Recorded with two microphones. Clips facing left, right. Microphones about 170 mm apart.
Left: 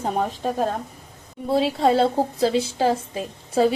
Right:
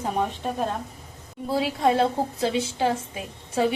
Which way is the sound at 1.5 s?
30° left (ahead or behind).